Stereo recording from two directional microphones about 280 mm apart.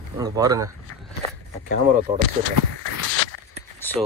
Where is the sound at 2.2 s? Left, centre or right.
Right.